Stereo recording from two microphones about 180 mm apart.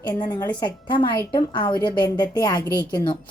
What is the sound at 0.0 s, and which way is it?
A woman's voice, 20° left (ahead or behind).